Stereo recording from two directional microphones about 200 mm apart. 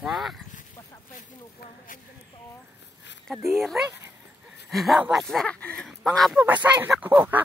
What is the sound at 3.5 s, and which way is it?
Speech, centre (ahead or behind).